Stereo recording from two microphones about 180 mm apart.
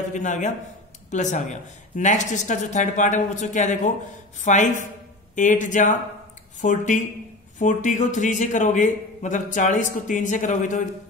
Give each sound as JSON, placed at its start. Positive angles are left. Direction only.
{"t": 0.1, "sound": "a man's voice", "side_deg": 45}